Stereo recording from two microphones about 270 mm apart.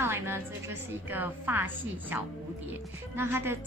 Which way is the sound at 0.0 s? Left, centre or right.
Centre.